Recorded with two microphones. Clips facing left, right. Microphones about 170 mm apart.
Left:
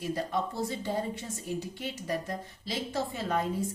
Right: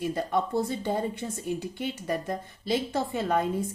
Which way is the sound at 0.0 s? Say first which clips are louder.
Right 4 dB; 55° right (ahead or behind).